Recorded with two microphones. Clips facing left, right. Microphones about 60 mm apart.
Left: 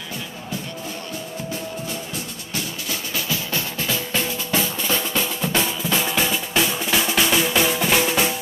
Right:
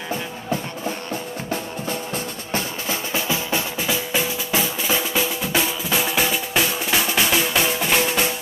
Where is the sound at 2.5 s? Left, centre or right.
Right.